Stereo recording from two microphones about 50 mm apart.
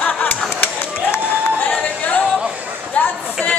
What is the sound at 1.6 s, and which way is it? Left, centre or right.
Chatter, left.